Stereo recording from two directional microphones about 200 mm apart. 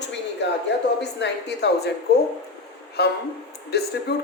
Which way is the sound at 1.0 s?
60° left (ahead or behind).